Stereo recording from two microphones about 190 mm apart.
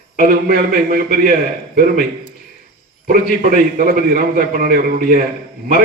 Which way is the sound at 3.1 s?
50° right (ahead or behind).